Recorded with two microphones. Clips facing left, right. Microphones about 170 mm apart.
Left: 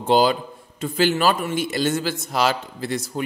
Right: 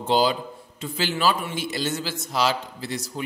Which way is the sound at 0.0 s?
50° left (ahead or behind).